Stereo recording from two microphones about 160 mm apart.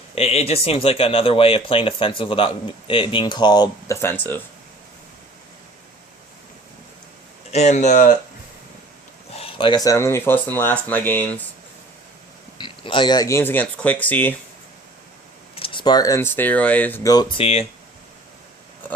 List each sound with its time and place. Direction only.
0.2 s speech: 40° left (ahead or behind); by 4.4 s 15° left (ahead or behind)
7.5 s speech: 45° left (ahead or behind)
9.3 s speech: 35° left (ahead or behind); by 11.4 s 10° left (ahead or behind)
12.5 s speech: 30° left (ahead or behind); by 14.3 s 10° left (ahead or behind)
15.5 s speech: 35° left (ahead or behind); by 17.1 s 10° left (ahead or behind)
17.1 s speech: 25° left (ahead or behind)
17.4 s speech: 40° left (ahead or behind)